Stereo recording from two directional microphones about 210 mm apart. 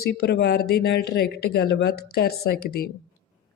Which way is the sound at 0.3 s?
50° left (ahead or behind).